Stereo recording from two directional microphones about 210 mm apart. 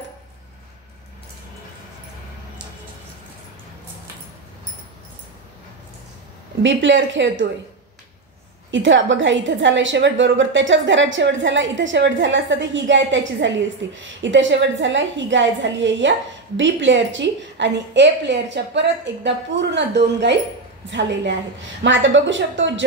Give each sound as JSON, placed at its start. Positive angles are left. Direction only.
{"t": 6.6, "sound": "a woman's voice", "side_deg": -60}
{"t": 8.7, "sound": "a woman's voice", "side_deg": -60}